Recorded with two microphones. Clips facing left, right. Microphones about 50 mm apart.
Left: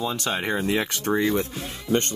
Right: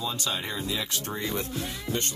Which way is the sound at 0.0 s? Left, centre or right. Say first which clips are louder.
Left 5 dB; left.